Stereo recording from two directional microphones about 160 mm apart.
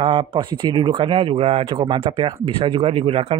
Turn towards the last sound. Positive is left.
turn(degrees=-35)  # may be behind; listen again after turning